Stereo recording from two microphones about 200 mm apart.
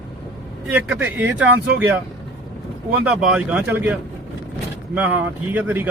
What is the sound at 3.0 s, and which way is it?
Speech, 5° right (ahead or behind).